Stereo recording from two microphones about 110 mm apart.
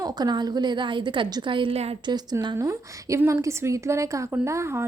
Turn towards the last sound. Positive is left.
turn(degrees=-25)  # may be behind; listen again after turning